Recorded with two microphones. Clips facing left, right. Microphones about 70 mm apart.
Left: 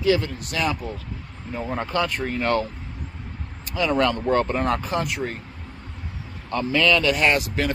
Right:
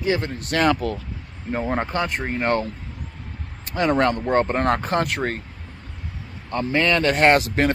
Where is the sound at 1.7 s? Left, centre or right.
Right.